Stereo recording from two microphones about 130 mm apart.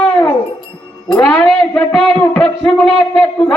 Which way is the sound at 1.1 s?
5° left (ahead or behind).